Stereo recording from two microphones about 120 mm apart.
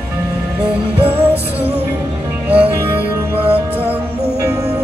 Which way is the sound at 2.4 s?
15° right (ahead or behind).